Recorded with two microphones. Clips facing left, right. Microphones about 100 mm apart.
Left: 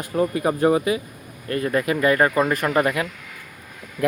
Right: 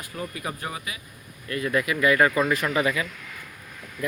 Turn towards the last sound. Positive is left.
turn(degrees=70)  # may be behind; listen again after turning